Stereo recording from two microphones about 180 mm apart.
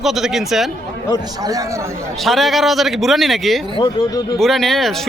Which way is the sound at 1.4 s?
20° right (ahead or behind).